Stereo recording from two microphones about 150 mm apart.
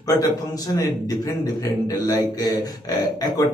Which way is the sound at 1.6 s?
25° left (ahead or behind).